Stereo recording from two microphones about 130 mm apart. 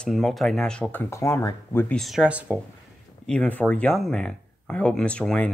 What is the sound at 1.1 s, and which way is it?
Speech, 20° left (ahead or behind).